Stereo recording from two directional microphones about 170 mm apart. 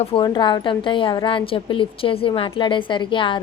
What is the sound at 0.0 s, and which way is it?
A woman's voice, 30° left (ahead or behind).